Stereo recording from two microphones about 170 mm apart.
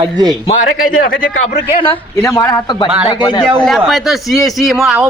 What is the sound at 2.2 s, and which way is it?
Speech, 20° left (ahead or behind).